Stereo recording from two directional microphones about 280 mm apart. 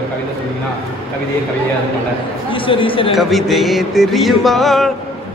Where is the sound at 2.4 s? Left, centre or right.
Centre.